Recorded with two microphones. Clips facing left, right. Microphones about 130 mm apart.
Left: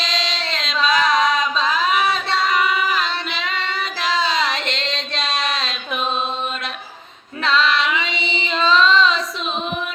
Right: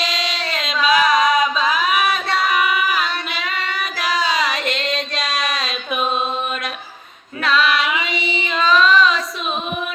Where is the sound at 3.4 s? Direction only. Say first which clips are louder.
Even; 25° left (ahead or behind).